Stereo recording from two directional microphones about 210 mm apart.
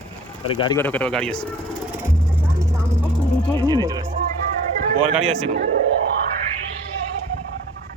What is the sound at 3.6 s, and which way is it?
Music, 15° right (ahead or behind).